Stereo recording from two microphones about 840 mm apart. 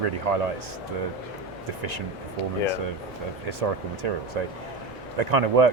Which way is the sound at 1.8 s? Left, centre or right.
Right.